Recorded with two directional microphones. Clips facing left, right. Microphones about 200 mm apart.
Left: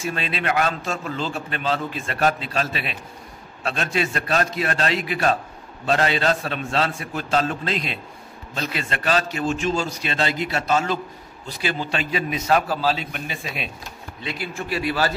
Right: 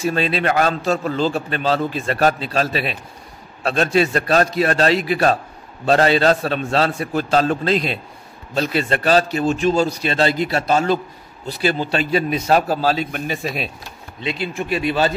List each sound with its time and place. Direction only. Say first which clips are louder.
0.0 s a man's voice: right 7 dB; 35° right (ahead or behind)
14.2 s speech: right 6 dB; 20° right (ahead or behind)